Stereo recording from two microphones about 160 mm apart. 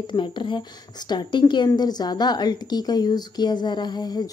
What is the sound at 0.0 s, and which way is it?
Speech, 30° left (ahead or behind).